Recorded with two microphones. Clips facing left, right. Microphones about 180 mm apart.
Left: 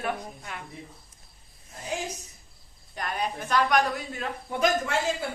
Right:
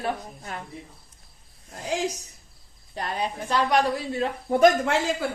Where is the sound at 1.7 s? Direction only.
85° right.